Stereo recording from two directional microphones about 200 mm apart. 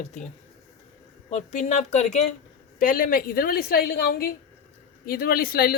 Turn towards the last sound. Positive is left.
turn(degrees=50)  # may be behind; listen again after turning